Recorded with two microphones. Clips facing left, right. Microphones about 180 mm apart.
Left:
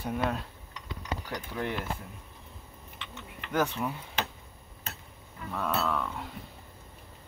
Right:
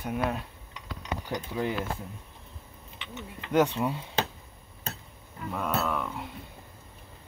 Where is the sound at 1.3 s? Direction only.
15° right (ahead or behind).